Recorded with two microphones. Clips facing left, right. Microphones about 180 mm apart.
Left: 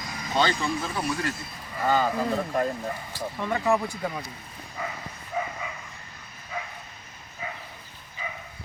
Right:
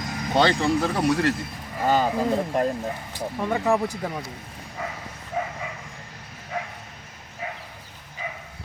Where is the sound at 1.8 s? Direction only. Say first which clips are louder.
Right 2 dB; 20° right (ahead or behind).